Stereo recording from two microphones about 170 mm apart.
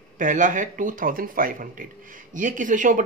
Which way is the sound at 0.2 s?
50° right (ahead or behind).